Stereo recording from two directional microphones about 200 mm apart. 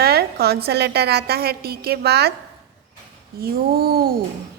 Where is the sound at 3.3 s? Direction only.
50° right (ahead or behind).